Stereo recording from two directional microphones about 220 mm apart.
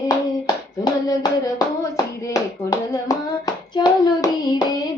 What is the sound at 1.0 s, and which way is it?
Hands, 15° left (ahead or behind).